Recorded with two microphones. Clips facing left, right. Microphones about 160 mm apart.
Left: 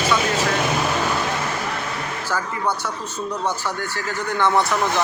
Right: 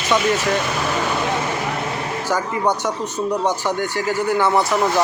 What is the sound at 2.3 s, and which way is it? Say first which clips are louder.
Speech: right 4 dB; 20° right (ahead or behind).